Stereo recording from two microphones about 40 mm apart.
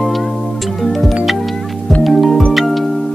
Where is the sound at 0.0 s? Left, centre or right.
Centre.